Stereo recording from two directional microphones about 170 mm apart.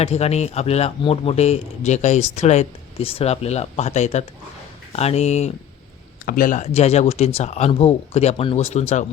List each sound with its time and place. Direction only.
0.0 s speech: 40° left (ahead or behind)
6.2 s speech: 55° left (ahead or behind)